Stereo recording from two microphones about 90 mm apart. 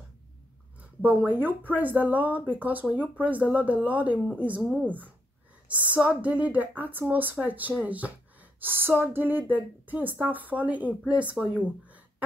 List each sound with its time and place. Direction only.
1.0 s a woman's voice: 20° right (ahead or behind)